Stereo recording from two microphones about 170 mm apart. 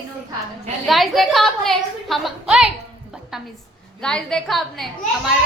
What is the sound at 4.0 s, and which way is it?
Speech, 5° left (ahead or behind).